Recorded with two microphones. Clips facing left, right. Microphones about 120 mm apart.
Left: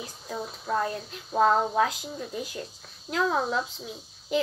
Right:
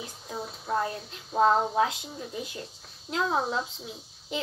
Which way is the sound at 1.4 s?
25° right (ahead or behind).